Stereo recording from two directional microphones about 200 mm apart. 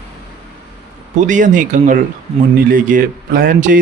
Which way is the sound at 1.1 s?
40° right (ahead or behind).